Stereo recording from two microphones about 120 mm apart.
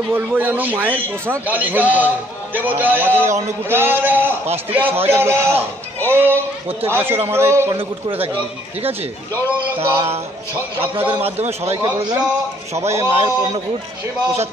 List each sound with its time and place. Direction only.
0.1 s a man's voice: 15° right (ahead or behind)
7.7 s a man's voice: 50° right (ahead or behind)
9.8 s a man's voice: 20° right (ahead or behind)
11.2 s a man's voice: 60° right (ahead or behind)
11.7 s a man's voice: 30° right (ahead or behind)